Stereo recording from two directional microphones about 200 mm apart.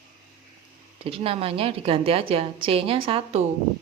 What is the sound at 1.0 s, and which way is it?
A woman's voice, 30° right (ahead or behind).